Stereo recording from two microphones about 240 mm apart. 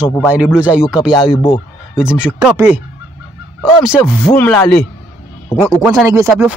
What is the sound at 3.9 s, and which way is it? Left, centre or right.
Speech, centre.